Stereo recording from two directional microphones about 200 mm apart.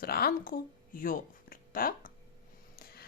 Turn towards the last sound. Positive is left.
turn(degrees=50)  # may be behind; listen again after turning